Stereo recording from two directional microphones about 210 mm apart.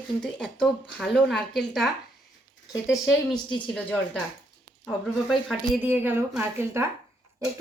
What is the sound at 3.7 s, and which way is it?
A woman's voice, 5° left (ahead or behind).